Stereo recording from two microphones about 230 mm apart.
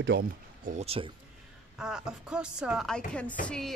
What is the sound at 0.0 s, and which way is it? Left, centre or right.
Speech, right.